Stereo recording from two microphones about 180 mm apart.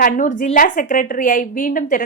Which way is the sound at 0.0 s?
45° left (ahead or behind).